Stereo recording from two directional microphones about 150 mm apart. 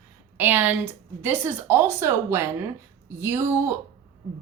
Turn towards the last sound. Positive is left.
turn(degrees=-15)  # may be behind; listen again after turning